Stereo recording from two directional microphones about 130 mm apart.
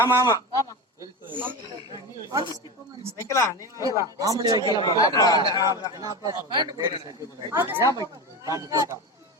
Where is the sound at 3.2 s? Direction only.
25° left (ahead or behind).